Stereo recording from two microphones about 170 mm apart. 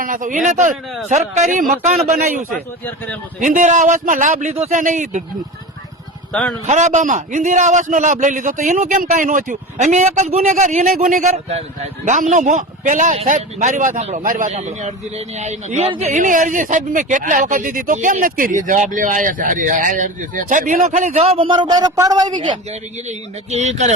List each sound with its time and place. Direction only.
0.0 s speech: 50° right (ahead or behind)
3.4 s speech: 50° right (ahead or behind)
6.3 s a man's voice: 5° left (ahead or behind)
6.7 s speech: 45° right (ahead or behind); by 22.5 s 25° right (ahead or behind)
23.0 s speech: 40° right (ahead or behind)